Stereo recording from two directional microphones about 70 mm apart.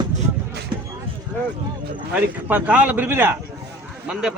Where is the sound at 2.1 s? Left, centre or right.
Right.